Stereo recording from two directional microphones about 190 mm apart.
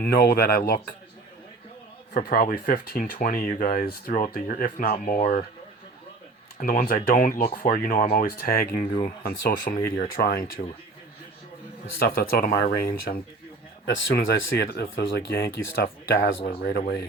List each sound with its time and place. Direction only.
0.0 s speech: 55° left (ahead or behind)
2.1 s speech: 50° left (ahead or behind)
6.6 s speech: 50° left (ahead or behind)
11.9 s speech: 50° left (ahead or behind)
13.8 s speech: 65° left (ahead or behind)